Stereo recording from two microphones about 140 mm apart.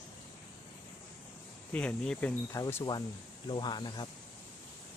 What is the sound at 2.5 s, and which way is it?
Speech, 20° left (ahead or behind).